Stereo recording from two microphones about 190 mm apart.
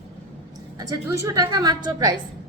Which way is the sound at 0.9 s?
15° right (ahead or behind).